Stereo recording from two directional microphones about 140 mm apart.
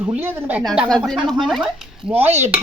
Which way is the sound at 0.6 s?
Centre (ahead or behind).